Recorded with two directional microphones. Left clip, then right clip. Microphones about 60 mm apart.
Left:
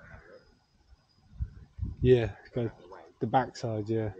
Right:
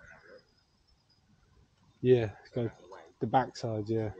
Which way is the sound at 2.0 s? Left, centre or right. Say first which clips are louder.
Left 2 dB; centre.